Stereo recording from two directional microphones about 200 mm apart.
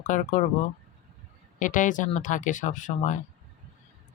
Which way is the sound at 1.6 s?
40° left (ahead or behind).